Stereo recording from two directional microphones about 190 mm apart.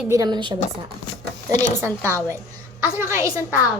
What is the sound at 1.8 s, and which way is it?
A woman's voice, 15° right (ahead or behind).